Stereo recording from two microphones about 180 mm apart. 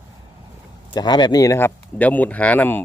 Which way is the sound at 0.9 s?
25° left (ahead or behind).